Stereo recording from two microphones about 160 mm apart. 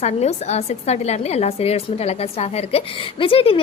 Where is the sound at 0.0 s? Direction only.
45° left (ahead or behind).